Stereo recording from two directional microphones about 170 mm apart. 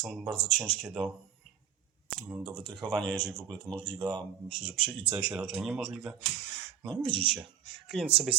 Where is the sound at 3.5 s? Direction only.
25° right (ahead or behind).